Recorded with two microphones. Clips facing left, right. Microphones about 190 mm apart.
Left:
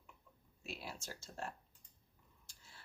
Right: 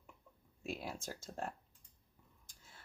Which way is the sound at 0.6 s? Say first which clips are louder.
Right 5 dB; 50° right (ahead or behind).